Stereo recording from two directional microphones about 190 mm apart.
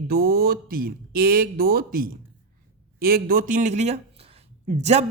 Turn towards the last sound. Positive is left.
turn(degrees=-35)  # may be behind; listen again after turning